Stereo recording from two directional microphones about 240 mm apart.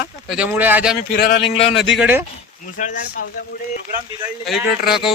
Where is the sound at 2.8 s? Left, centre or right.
Left.